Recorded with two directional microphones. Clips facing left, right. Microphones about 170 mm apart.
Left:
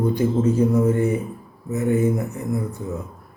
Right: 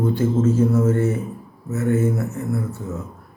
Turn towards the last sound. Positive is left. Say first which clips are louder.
# even
turn(degrees=15)  # may be behind; listen again after turning